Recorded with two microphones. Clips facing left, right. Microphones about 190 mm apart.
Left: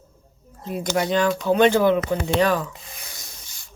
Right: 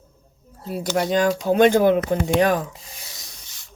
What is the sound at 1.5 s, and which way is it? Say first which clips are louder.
Speech: right 1 dB; 45° right (ahead or behind).